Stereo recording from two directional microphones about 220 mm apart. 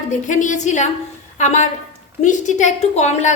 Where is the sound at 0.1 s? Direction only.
35° left (ahead or behind).